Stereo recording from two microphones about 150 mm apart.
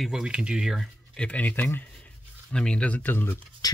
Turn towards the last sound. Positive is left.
turn(degrees=10)  # may be behind; listen again after turning